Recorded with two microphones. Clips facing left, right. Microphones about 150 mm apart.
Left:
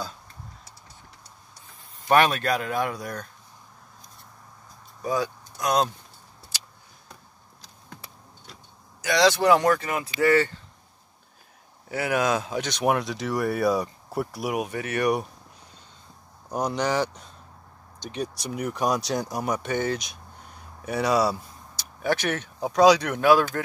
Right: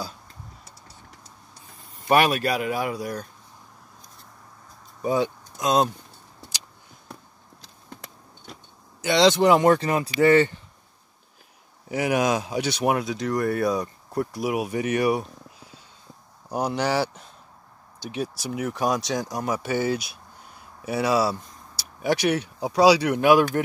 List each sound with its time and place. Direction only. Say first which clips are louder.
2.0 s speech: even; 10° right (ahead or behind)
5.0 s speech: right 3 dB; 25° right (ahead or behind)
9.0 s speech: right 2 dB; 20° right (ahead or behind)
11.9 s speech: right 2 dB; 15° right (ahead or behind)
14.7 s speech: right 4 dB; 15° right (ahead or behind)
16.4 s speech: right 1 dB; 10° right (ahead or behind)
22.0 s speech: right 3 dB; 10° right (ahead or behind)